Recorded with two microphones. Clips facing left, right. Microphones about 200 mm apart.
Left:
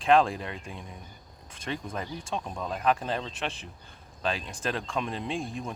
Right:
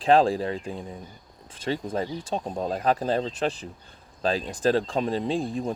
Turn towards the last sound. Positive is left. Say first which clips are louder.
# right 6 dB
turn(degrees=-35)  # may be behind; listen again after turning